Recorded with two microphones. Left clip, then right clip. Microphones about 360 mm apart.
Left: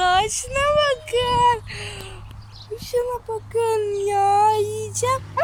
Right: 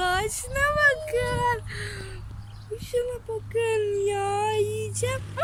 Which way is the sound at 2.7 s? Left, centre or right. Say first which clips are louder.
Left 4 dB; centre.